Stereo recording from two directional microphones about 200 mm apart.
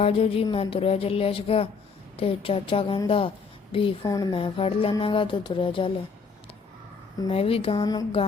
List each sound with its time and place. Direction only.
0.0 s a woman's voice: 30° left (ahead or behind)
7.2 s a woman's voice: 30° left (ahead or behind)